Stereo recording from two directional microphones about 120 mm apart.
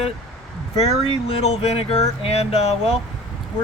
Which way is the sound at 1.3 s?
60° left (ahead or behind).